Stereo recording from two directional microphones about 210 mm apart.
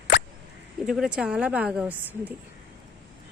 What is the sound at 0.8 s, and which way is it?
Speech, centre (ahead or behind).